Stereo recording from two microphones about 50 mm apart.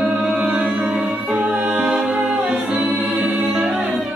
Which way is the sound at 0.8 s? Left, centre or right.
Right.